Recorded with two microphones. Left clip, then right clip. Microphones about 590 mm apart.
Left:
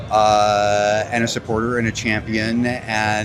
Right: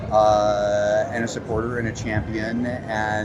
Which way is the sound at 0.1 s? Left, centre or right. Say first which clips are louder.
Left 3 dB; left.